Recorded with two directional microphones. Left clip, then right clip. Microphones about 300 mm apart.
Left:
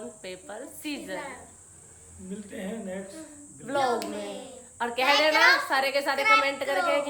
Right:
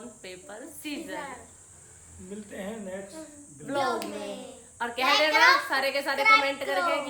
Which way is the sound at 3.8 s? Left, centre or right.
Centre.